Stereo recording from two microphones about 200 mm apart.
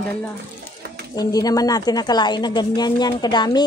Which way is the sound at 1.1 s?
20° left (ahead or behind).